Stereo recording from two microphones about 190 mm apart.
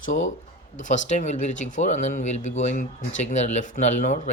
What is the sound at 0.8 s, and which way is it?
Speech, 40° left (ahead or behind).